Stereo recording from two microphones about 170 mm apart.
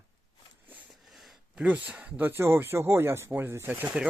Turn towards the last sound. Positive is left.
turn(degrees=-10)  # may be behind; listen again after turning